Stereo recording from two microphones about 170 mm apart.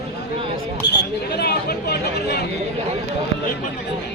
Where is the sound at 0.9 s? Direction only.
75° left (ahead or behind).